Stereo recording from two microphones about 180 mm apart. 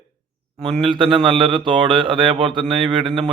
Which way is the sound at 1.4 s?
25° right (ahead or behind).